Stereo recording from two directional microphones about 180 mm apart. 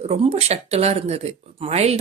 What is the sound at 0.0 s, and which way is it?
Speech, 35° right (ahead or behind).